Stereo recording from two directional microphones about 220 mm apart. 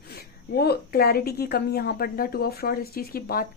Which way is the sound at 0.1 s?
45° left (ahead or behind).